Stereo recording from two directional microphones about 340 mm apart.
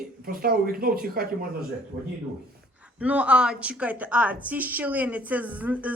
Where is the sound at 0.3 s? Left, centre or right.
Right.